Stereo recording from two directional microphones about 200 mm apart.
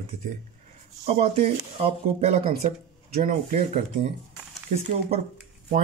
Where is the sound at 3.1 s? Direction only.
40° right (ahead or behind).